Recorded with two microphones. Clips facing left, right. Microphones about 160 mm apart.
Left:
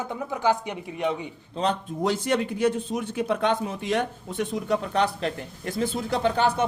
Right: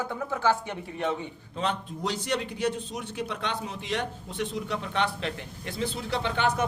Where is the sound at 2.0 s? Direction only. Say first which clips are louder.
Left 6 dB; 50° left (ahead or behind); by 6.6 s 35° left (ahead or behind).